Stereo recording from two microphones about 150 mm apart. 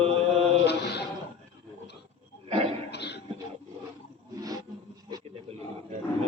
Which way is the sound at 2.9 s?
90° left.